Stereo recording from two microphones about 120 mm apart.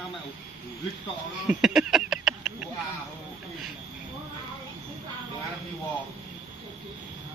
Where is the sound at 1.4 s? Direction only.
5° right (ahead or behind).